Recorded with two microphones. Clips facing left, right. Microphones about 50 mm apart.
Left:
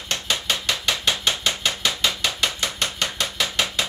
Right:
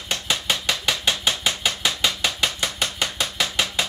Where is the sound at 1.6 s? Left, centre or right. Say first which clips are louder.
Even; centre.